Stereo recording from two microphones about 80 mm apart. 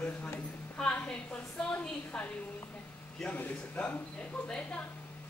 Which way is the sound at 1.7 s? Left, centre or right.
Left.